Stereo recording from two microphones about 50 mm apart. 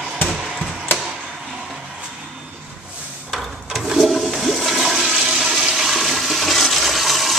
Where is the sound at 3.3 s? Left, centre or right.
Centre.